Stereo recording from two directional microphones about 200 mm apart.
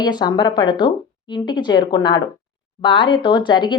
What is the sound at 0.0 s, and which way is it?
Speech, 20° left (ahead or behind).